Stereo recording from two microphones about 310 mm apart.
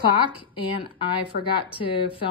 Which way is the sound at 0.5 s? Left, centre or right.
Centre.